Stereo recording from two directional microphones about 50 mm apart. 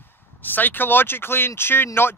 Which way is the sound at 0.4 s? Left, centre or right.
Left.